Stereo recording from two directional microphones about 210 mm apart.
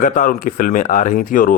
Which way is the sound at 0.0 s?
40° left (ahead or behind).